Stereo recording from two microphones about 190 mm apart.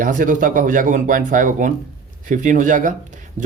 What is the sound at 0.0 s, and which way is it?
Speech, 45° right (ahead or behind).